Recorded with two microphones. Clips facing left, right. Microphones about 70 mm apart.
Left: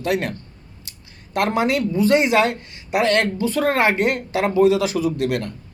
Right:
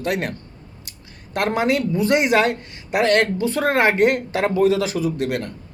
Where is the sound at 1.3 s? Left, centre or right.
Right.